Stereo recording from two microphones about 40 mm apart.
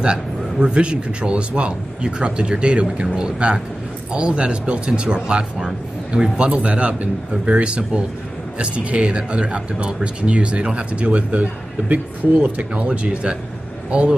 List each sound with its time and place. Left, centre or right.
0.0 s speech: right